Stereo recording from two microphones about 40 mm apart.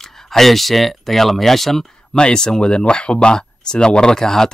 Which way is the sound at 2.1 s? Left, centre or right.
Centre.